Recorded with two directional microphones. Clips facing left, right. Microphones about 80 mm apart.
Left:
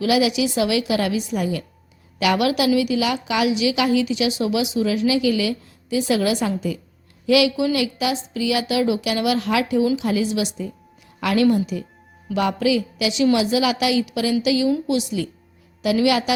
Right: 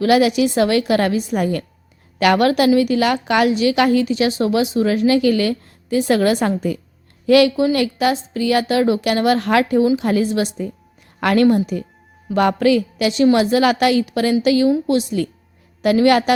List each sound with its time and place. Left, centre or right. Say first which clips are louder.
0.0 s a woman's voice: right 5 dB; right